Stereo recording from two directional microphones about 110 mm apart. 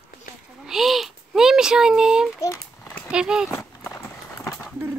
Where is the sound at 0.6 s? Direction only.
5° right (ahead or behind).